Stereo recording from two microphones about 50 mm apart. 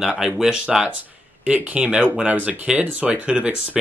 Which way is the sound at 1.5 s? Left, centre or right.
Right.